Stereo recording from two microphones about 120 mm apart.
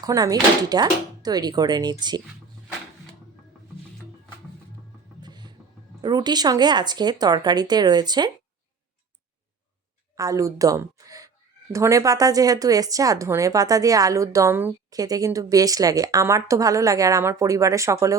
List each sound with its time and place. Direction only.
0.0 s speech: 30° right (ahead or behind)
5.2 s vehicle: 35° right (ahead or behind)
6.0 s speech: 35° right (ahead or behind)
10.2 s a woman's voice: 25° right (ahead or behind)
14.8 s a woman's voice: 30° right (ahead or behind)